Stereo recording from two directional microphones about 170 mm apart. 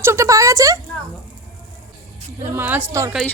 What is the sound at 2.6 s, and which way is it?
Speech, 10° right (ahead or behind).